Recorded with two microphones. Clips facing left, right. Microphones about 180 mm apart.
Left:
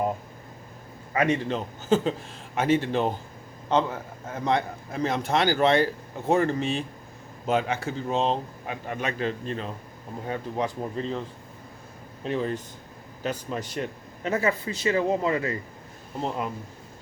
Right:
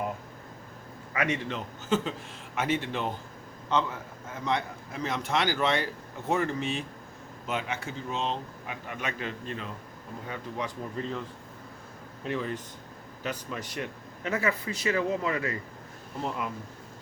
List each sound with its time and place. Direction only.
1.1 s a man's voice: 35° left (ahead or behind)
12.2 s speech: 35° left (ahead or behind)